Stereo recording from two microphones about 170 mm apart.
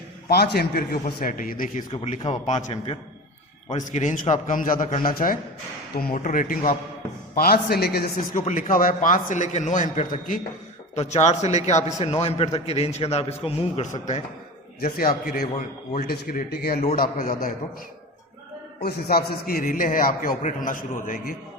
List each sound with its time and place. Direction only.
0.3 s a man's voice: 70° left (ahead or behind); by 1.8 s 55° left (ahead or behind)
2.2 s a man's voice: 45° left (ahead or behind)
7.3 s a man's voice: 65° left (ahead or behind)
8.4 s a man's voice: 50° left (ahead or behind)
14.9 s a man's voice: 60° left (ahead or behind)
18.8 s a man's voice: 65° left (ahead or behind)